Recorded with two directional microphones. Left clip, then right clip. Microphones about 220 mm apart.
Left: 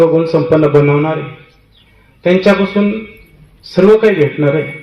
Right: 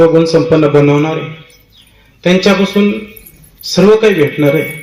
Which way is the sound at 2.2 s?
45° right (ahead or behind).